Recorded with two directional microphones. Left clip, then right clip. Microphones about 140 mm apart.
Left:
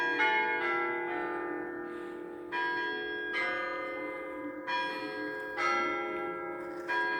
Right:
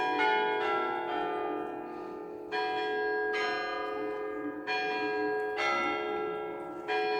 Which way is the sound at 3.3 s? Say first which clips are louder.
Right 1 dB; 45° right (ahead or behind).